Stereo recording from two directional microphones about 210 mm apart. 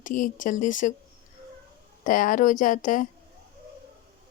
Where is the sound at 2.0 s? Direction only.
40° left (ahead or behind).